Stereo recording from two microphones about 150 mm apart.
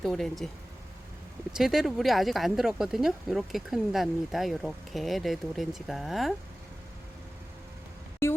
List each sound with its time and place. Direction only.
0.0 s speech: centre (ahead or behind)
1.5 s speech: 5° right (ahead or behind)
8.2 s a sound: 15° left (ahead or behind)